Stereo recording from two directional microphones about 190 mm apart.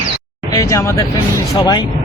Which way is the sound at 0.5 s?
15° left (ahead or behind).